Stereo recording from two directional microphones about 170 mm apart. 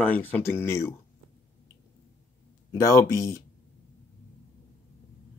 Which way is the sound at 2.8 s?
20° left (ahead or behind).